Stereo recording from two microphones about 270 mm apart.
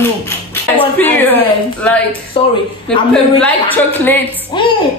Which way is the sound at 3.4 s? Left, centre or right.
Centre.